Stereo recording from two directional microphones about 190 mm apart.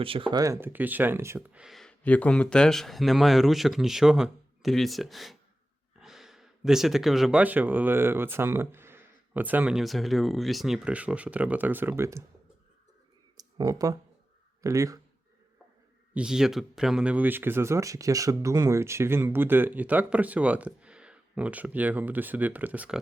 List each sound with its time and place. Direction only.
0.0 s speech: 30° right (ahead or behind)
13.3 s a sound: 20° right (ahead or behind)
14.6 s speech: 15° right (ahead or behind)
16.1 s speech: 5° right (ahead or behind)